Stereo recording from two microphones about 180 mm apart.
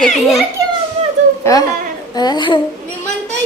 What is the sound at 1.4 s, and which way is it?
A child's voice, 15° left (ahead or behind).